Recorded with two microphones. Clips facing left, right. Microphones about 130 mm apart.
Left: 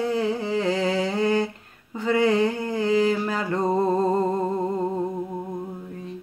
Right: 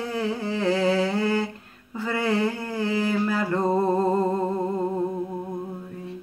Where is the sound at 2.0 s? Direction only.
20° left (ahead or behind).